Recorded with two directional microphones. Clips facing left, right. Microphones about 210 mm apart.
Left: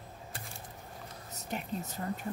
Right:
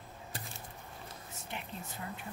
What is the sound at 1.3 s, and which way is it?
Whispering, 40° left (ahead or behind).